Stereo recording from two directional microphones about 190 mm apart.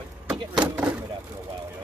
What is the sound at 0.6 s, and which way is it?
Speech, 5° right (ahead or behind).